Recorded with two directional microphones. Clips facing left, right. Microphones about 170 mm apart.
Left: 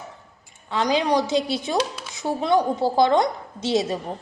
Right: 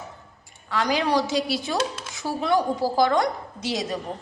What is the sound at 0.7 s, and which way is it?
Speech, 20° left (ahead or behind).